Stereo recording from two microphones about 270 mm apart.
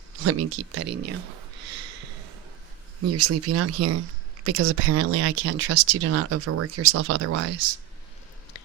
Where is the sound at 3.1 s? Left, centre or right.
Right.